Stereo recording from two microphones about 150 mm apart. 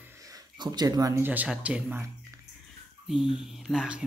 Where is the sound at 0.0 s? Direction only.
20° right (ahead or behind).